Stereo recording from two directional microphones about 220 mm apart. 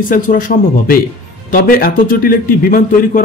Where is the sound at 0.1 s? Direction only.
40° left (ahead or behind).